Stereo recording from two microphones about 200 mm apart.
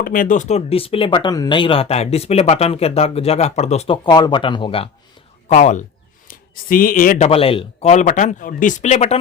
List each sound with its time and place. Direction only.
0.0 s speech: 45° left (ahead or behind)
7.3 s speech: 30° left (ahead or behind)